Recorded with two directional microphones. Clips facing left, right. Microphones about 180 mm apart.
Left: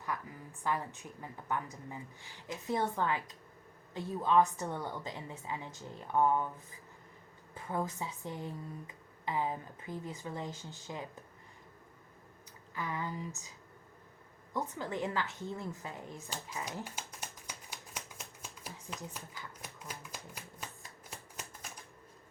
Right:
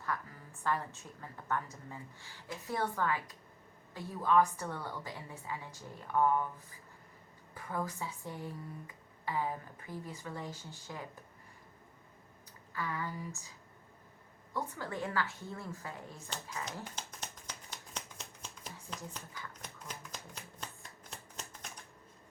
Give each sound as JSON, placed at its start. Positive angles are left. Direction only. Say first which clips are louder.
{"t": 0.0, "sound": "a woman's voice", "louder": "even", "side_deg": 15}
{"t": 7.5, "sound": "speech", "louder": "left 2 dB", "side_deg": 20}
{"t": 12.7, "sound": "speech", "louder": "left 1 dB", "side_deg": 20}
{"t": 14.5, "sound": "speech", "louder": "left 2 dB", "side_deg": 20}
{"t": 16.3, "sound": "shuffling cards", "louder": "even", "side_deg": 15}
{"t": 21.1, "sound": "typewriter", "louder": "left 1 dB", "side_deg": 10}